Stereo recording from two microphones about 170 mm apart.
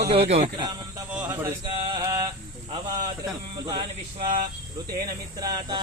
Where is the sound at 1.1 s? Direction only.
10° right (ahead or behind).